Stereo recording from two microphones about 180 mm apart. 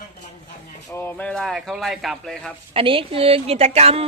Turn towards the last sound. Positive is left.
turn(degrees=-35)  # may be behind; listen again after turning